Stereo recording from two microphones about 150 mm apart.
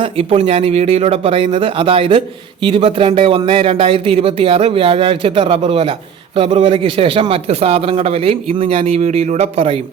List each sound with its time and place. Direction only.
0.0 s speech: 40° right (ahead or behind)